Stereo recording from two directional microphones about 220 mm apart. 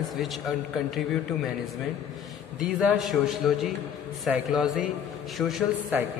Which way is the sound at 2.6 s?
Centre (ahead or behind).